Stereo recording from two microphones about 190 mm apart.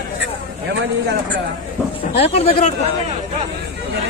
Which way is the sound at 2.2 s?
30° left (ahead or behind).